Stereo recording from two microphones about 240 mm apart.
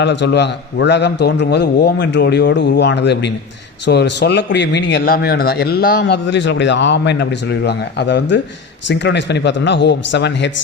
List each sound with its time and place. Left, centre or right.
0.0 s speech: left